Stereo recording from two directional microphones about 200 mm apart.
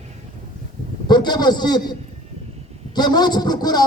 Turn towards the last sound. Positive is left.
turn(degrees=20)  # may be behind; listen again after turning